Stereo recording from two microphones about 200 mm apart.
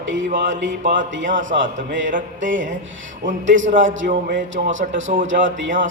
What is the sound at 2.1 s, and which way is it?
Speech, 40° right (ahead or behind).